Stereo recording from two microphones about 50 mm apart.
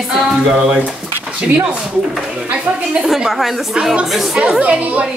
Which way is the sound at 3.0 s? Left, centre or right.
Centre.